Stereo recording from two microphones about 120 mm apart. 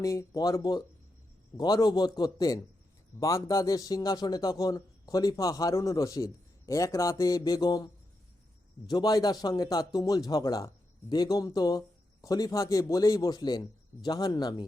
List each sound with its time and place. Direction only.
0.0 s a man's voice: 30° left (ahead or behind)
8.9 s a man's voice: 35° left (ahead or behind)